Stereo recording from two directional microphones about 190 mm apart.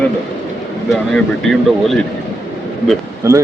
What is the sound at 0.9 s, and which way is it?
Speech, centre (ahead or behind).